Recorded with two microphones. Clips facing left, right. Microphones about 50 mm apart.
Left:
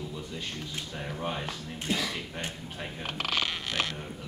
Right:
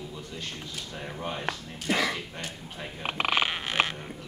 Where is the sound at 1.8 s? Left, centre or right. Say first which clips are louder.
Right 5 dB; right.